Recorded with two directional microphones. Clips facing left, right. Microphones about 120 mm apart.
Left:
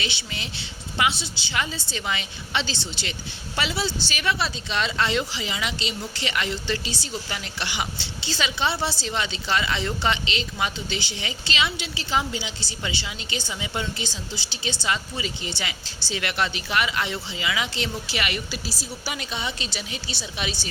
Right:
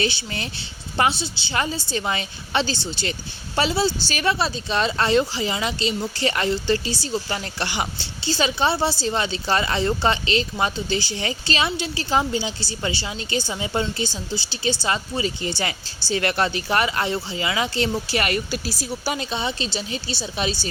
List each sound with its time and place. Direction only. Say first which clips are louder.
0.0 s speech: right 7 dB; 40° right (ahead or behind)
19.1 s speech: right 5 dB; 35° right (ahead or behind)